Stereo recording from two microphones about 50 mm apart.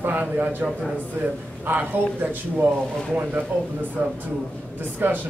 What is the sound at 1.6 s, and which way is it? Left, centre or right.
A man's voice, right.